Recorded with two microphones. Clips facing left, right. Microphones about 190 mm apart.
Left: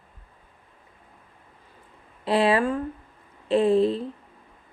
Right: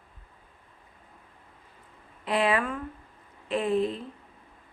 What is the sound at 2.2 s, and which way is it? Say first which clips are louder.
A woman's voice: left 5 dB; 30° left (ahead or behind).